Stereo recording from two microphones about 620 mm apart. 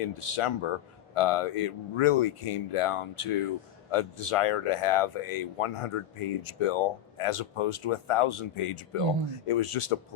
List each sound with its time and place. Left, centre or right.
0.0 s speech: left